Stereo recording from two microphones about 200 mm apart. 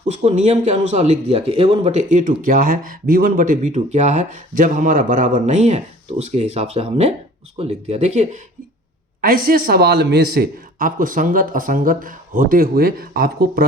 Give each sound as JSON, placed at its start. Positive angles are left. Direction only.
{"t": 0.1, "sound": "speech", "side_deg": -35}
{"t": 9.2, "sound": "speech", "side_deg": -45}